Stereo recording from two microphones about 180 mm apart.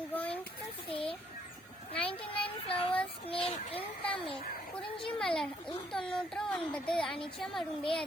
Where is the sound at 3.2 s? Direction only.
30° left (ahead or behind).